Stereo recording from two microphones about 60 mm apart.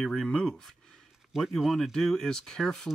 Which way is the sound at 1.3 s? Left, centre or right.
Centre.